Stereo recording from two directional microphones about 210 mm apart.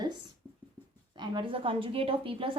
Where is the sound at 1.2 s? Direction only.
20° right (ahead or behind).